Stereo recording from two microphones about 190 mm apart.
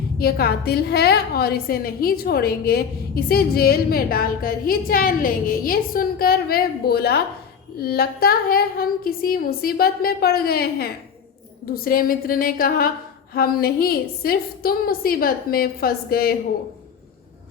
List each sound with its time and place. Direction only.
0.2 s a woman's voice: 55° left (ahead or behind)